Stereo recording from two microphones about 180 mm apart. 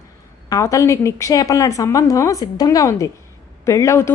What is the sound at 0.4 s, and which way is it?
A woman's voice, 20° left (ahead or behind).